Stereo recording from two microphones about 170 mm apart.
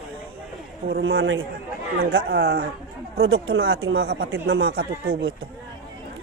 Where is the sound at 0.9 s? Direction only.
90° right.